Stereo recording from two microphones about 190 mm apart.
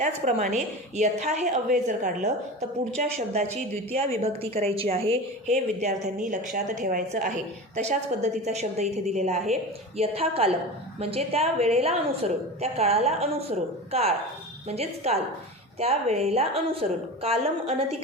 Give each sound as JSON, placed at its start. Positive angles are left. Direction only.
{"t": 0.0, "sound": "a woman's voice", "side_deg": -40}